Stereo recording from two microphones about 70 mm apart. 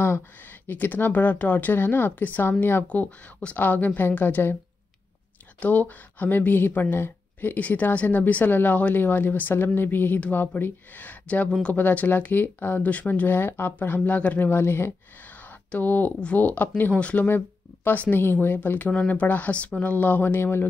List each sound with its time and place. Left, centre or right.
0.7 s speech: left
5.6 s speech: left
15.7 s speech: left